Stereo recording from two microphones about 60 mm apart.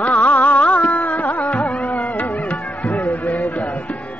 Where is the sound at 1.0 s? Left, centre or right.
Left.